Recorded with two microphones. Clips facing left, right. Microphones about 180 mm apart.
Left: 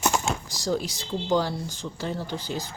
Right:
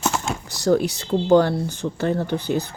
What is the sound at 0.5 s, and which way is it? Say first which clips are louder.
Speech: right 13 dB; 60° right (ahead or behind).